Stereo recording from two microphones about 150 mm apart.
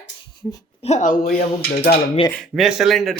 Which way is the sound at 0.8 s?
55° left (ahead or behind).